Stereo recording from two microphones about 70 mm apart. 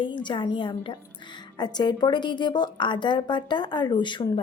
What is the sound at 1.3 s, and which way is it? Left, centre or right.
Speech, left.